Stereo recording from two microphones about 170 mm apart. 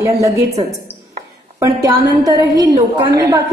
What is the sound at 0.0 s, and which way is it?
A woman's voice, 20° right (ahead or behind).